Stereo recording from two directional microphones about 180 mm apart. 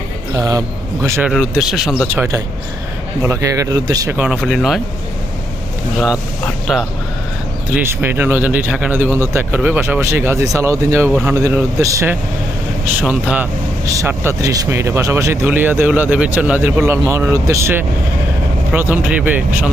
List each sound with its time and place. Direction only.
0.3 s speech: 20° right (ahead or behind)
1.3 s speech: 5° right (ahead or behind); by 4.2 s 20° right (ahead or behind)
4.2 s speech: 5° right (ahead or behind)
7.7 s speech: 10° right (ahead or behind)